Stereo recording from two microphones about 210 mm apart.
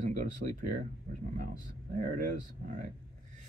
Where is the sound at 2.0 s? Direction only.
40° right (ahead or behind).